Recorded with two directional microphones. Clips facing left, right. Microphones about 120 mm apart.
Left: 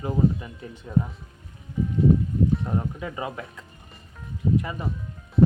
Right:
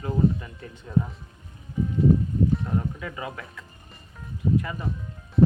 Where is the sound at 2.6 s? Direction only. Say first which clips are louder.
Even; 20° left (ahead or behind).